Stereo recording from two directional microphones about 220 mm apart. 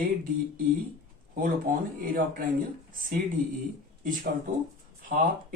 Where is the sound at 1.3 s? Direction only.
35° right (ahead or behind).